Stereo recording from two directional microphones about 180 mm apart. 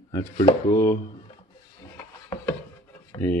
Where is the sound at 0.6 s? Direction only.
15° left (ahead or behind).